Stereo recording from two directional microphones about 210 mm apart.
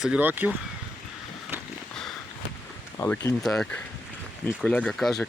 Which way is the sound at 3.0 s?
10° left (ahead or behind).